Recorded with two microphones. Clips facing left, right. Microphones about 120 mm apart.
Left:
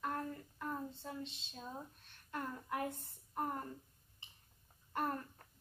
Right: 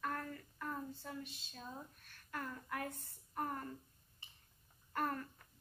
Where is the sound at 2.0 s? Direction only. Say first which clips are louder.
Left 2 dB; 25° left (ahead or behind).